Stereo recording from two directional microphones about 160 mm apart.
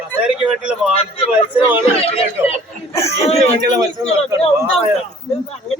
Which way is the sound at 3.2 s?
40° left (ahead or behind).